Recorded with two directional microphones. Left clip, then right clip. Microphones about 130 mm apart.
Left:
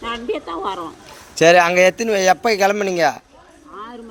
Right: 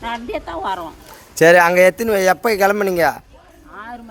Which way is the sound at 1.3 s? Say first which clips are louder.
Right 1 dB; 55° right (ahead or behind).